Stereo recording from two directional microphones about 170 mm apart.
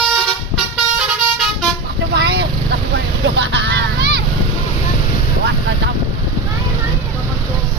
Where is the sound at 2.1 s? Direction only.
80° right.